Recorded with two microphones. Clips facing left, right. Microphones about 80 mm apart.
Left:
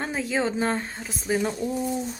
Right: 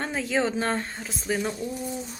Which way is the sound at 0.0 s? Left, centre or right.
Centre.